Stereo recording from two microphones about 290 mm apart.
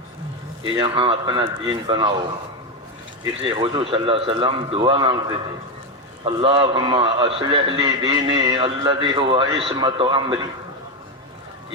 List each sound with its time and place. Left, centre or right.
0.6 s a man's voice: centre
3.4 s a man's voice: centre